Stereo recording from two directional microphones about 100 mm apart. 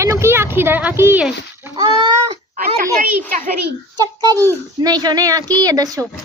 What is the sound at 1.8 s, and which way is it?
Speech, 60° right (ahead or behind).